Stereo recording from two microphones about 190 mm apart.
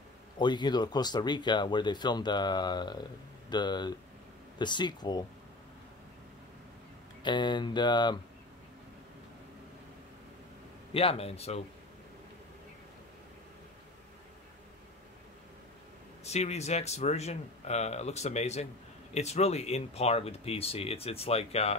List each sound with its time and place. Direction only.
0.4 s speech: 25° left (ahead or behind)
7.2 s speech: 25° left (ahead or behind)
10.9 s speech: 30° left (ahead or behind)
16.3 s speech: 35° left (ahead or behind)